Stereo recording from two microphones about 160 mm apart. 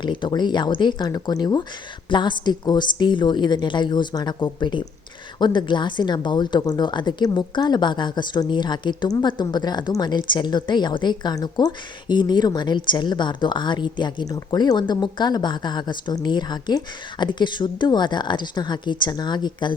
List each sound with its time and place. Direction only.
0.0 s speech: 30° left (ahead or behind)